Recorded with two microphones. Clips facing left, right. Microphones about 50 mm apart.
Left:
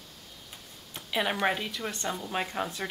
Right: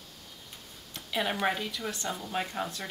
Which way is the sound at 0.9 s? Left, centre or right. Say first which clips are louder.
Left 2 dB; centre.